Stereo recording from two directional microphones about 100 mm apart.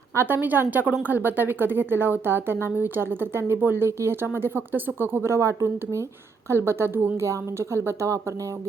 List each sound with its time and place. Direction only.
0.1 s a woman's voice: 25° right (ahead or behind)